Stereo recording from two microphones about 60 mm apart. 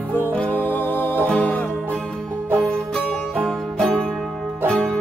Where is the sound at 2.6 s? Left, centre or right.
Centre.